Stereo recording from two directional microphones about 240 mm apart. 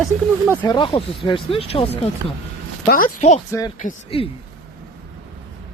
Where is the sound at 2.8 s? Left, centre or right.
Left.